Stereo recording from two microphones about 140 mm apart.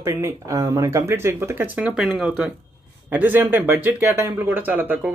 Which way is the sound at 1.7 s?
5° right (ahead or behind).